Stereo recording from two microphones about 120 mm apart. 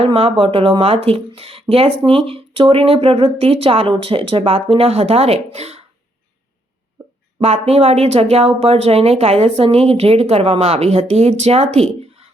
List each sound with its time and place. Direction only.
0.0 s speech: 50° right (ahead or behind)
7.3 s speech: 60° right (ahead or behind)